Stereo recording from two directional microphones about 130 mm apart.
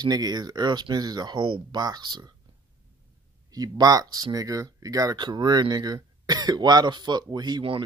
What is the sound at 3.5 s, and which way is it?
Speech, 30° right (ahead or behind).